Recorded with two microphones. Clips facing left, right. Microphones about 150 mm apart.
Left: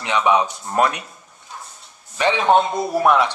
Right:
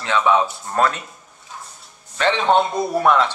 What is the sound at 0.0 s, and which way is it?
A man's voice, 15° left (ahead or behind).